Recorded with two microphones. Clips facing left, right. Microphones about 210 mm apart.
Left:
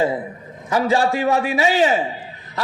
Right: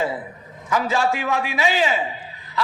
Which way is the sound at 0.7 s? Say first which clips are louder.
Left 3 dB; 35° left (ahead or behind).